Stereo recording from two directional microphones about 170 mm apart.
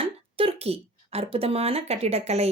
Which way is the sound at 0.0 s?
35° right (ahead or behind).